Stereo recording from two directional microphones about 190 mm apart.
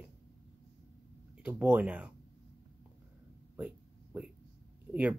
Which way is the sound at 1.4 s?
10° right (ahead or behind).